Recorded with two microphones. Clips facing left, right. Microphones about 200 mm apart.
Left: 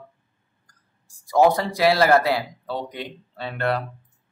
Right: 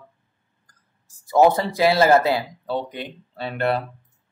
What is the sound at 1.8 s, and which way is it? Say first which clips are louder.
Speech: right 1 dB; 25° right (ahead or behind).